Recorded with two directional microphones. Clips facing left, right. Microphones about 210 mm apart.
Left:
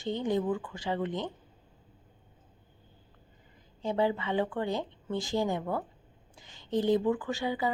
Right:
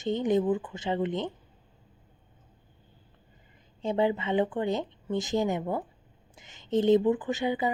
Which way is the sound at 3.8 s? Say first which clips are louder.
Right 2 dB; 20° right (ahead or behind).